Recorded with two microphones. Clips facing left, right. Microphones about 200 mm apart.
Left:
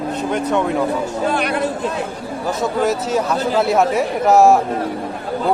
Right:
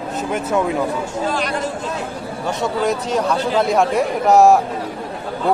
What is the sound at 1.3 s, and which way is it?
Speech, 60° left (ahead or behind).